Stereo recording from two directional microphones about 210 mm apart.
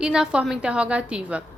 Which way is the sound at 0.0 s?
5° right (ahead or behind).